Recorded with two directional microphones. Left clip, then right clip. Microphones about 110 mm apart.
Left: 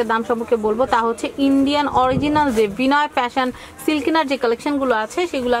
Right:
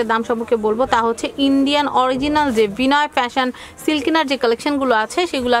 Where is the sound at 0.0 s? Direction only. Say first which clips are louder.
Right 1 dB; 30° right (ahead or behind).